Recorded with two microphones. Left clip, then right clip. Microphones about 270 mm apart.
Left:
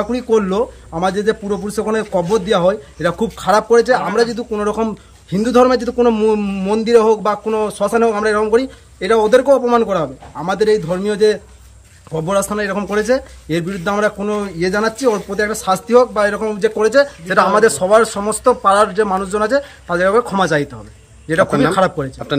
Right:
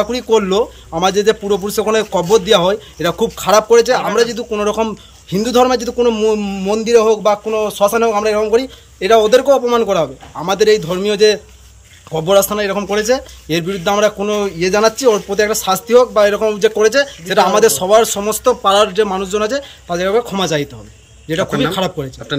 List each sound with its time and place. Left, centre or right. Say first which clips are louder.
0.0 s speech: right 2 dB; centre
17.0 s speech: even; centre
17.6 s speech: right 1 dB; centre